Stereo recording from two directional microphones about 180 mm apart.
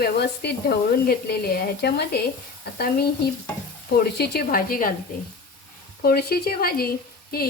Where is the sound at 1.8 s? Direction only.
65° left (ahead or behind).